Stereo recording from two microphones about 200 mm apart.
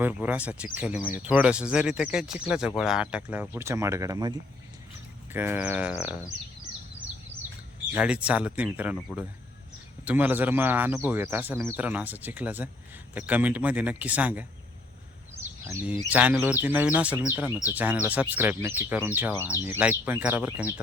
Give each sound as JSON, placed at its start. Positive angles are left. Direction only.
{"t": 0.0, "sound": "a man's voice", "side_deg": -10}
{"t": 7.9, "sound": "a man's voice", "side_deg": -5}
{"t": 15.6, "sound": "a man's voice", "side_deg": -10}